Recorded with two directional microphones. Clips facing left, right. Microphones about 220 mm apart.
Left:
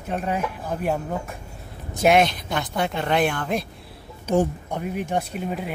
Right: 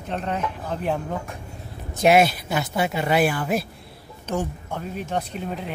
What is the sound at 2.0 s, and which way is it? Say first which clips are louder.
Speech: right 1 dB; 5° right (ahead or behind).